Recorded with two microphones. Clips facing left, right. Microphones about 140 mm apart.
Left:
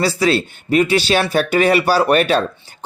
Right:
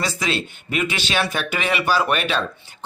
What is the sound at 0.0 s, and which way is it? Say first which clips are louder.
Speech: left 8 dB; 35° left (ahead or behind).